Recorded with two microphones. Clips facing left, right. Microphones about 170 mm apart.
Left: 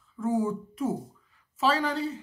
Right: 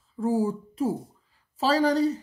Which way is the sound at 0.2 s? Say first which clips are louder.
Right 2 dB; 35° right (ahead or behind).